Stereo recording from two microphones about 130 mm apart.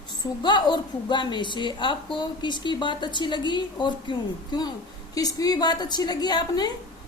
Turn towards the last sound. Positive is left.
turn(degrees=35)  # may be behind; listen again after turning